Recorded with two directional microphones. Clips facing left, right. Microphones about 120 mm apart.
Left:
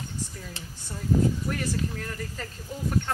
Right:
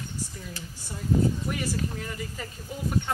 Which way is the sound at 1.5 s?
10° right (ahead or behind).